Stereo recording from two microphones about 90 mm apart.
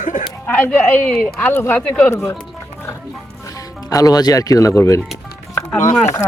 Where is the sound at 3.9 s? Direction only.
45° left (ahead or behind).